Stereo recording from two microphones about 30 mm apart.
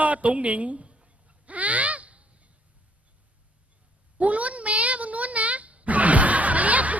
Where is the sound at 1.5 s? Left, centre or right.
Right.